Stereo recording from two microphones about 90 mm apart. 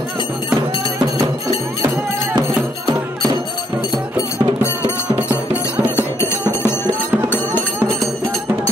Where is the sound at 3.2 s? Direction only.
50° right (ahead or behind).